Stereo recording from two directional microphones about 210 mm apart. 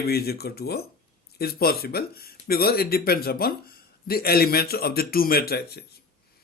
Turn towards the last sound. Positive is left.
turn(degrees=50)  # may be behind; listen again after turning